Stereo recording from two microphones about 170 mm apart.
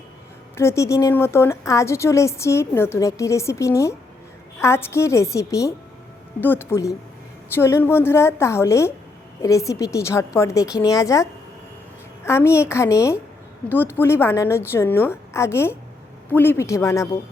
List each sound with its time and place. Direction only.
0.5 s a woman's voice: 15° left (ahead or behind)